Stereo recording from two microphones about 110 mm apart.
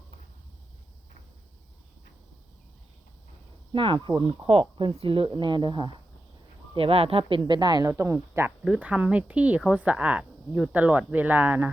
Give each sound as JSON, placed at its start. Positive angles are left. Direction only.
{"t": 3.7, "sound": "speech", "side_deg": -50}
{"t": 4.3, "sound": "speech", "side_deg": -60}
{"t": 4.9, "sound": "speech", "side_deg": -50}
{"t": 6.7, "sound": "speech", "side_deg": -60}
{"t": 7.9, "sound": "speech", "side_deg": -25}
{"t": 8.6, "sound": "speech", "side_deg": -10}